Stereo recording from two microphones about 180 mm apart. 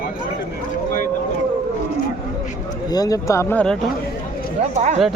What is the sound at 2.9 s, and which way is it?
Speech, 20° left (ahead or behind).